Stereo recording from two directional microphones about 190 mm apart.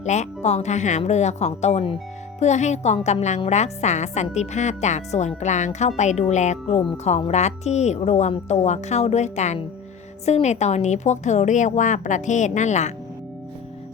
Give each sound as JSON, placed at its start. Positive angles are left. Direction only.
{"t": 0.0, "sound": "a woman's voice", "side_deg": 40}